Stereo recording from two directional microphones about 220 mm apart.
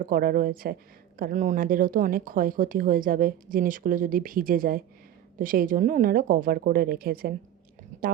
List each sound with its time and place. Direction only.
0.0 s a woman's voice: 40° right (ahead or behind)